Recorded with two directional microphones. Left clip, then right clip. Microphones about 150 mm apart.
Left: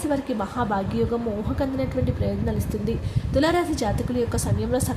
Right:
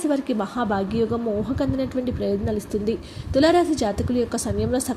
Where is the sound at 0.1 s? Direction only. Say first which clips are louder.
Right 2 dB; 30° right (ahead or behind).